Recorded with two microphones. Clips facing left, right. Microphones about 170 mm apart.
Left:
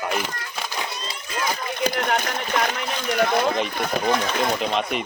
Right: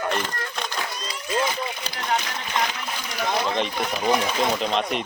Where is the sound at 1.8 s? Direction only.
55° left (ahead or behind).